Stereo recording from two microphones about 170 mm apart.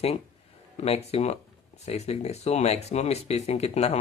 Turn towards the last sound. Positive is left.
turn(degrees=40)  # may be behind; listen again after turning